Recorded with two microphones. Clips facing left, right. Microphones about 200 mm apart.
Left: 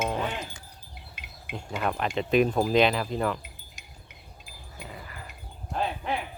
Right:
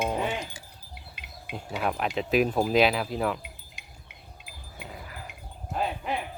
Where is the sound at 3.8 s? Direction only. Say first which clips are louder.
Even; 45° left (ahead or behind).